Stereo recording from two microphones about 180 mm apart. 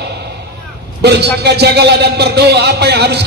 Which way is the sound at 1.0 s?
70° right (ahead or behind).